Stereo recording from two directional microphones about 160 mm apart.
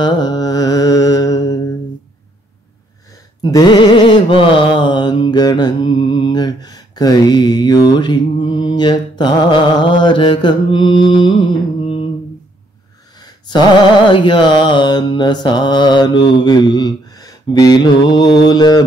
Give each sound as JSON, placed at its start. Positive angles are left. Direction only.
{"t": 0.0, "sound": "mantra", "side_deg": 25}
{"t": 3.5, "sound": "mantra", "side_deg": 25}
{"t": 14.0, "sound": "mantra", "side_deg": 30}